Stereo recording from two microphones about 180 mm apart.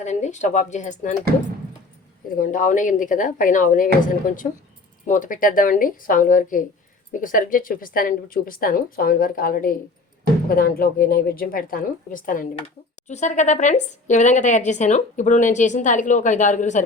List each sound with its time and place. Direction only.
0.0 s speech: 40° left (ahead or behind)
2.3 s speech: 50° left (ahead or behind)